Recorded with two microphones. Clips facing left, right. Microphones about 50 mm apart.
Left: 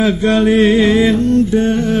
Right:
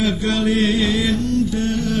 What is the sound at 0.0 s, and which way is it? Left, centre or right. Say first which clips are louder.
Mantra: left 7 dB; left.